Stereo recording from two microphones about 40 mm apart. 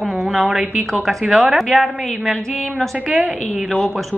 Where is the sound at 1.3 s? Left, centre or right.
Centre.